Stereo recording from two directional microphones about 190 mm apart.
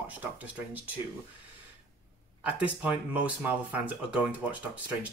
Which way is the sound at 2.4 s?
5° right (ahead or behind).